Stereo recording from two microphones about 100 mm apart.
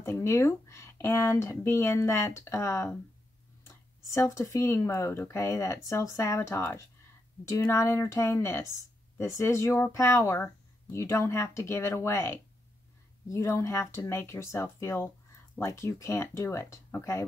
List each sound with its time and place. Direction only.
0.0 s speech: 25° left (ahead or behind)
4.1 s speech: 30° left (ahead or behind)